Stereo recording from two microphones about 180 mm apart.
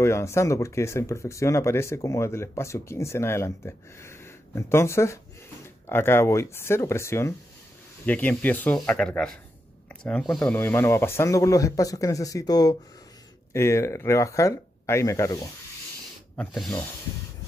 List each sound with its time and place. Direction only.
0.0 s speech: 15° left (ahead or behind)
16.3 s speech: centre (ahead or behind)